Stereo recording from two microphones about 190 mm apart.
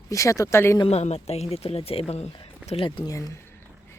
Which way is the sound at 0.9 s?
35° left (ahead or behind).